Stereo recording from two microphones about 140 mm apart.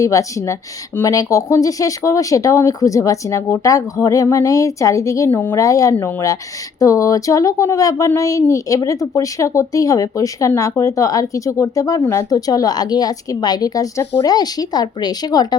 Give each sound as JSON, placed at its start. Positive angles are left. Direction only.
{"t": 0.0, "sound": "speech", "side_deg": 25}